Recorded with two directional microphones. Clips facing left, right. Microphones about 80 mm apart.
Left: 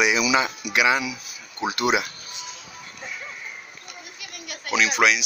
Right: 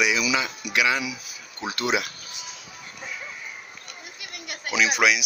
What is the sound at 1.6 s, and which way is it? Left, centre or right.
Speech, centre.